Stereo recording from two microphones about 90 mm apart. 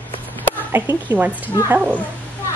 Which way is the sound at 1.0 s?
15° right (ahead or behind).